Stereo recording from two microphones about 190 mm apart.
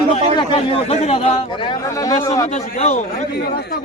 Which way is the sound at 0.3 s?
25° left (ahead or behind).